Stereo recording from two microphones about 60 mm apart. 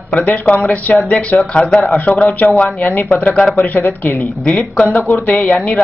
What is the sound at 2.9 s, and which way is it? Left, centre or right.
Speech, left.